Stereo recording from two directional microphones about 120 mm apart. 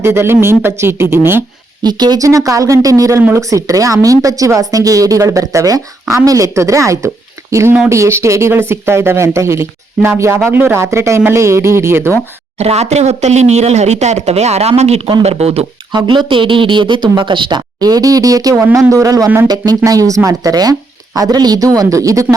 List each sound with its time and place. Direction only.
0.0 s speech: 20° right (ahead or behind)
1.8 s speech: 35° right (ahead or behind); by 12.1 s 20° right (ahead or behind)
12.5 s speech: 65° right (ahead or behind)
15.9 s speech: 40° right (ahead or behind)